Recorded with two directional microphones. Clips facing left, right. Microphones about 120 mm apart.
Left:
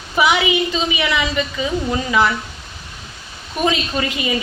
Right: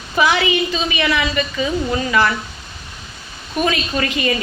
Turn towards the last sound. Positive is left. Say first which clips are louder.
# right 1 dB
turn(degrees=15)  # may be behind; listen again after turning